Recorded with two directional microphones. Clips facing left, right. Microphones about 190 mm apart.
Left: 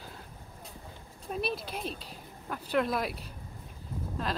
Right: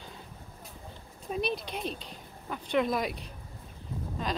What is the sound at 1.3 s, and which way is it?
Speech, 5° left (ahead or behind).